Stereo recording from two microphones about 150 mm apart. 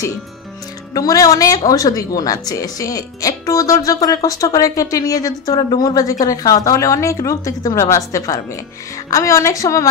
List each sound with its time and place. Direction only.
0.9 s speech: 25° left (ahead or behind)